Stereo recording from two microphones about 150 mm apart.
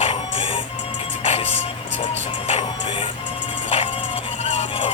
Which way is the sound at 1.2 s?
45° left (ahead or behind).